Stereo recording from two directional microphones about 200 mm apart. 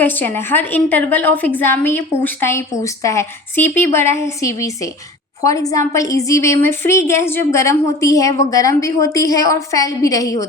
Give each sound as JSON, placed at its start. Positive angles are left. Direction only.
{"t": 0.0, "sound": "a woman's voice", "side_deg": 10}